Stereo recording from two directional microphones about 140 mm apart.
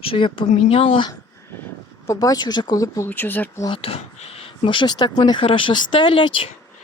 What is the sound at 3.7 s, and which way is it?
Speech, 40° left (ahead or behind).